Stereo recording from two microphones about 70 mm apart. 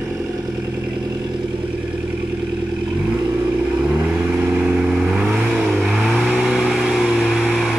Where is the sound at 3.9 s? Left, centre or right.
Right.